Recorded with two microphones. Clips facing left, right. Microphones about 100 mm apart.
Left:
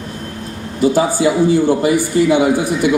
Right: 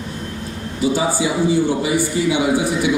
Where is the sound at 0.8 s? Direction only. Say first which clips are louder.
Left 5 dB; 55° left (ahead or behind).